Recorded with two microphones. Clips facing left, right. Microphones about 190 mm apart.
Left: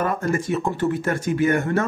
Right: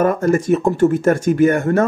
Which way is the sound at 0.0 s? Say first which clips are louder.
Right 7 dB; 45° right (ahead or behind).